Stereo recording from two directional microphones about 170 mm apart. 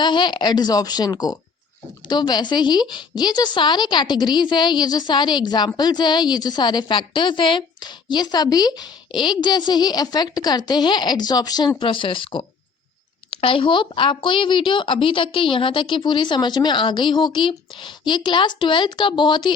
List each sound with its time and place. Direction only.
0.0 s speech: 25° left (ahead or behind)